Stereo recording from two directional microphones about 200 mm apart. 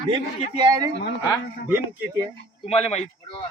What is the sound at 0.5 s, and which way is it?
Speech, 20° right (ahead or behind).